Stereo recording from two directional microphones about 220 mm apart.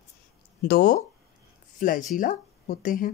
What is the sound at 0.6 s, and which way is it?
Speech, 40° left (ahead or behind).